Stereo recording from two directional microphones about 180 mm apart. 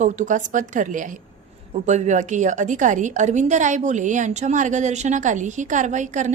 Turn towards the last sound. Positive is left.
turn(degrees=-40)  # may be behind; listen again after turning